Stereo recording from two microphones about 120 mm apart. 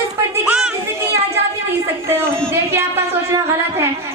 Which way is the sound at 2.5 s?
20° right (ahead or behind).